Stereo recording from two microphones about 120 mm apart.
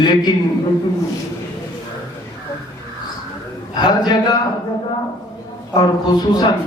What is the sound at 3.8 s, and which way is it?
Speech, 40° left (ahead or behind).